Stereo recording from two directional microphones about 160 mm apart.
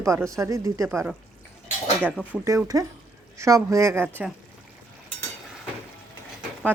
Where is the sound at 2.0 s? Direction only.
10° left (ahead or behind).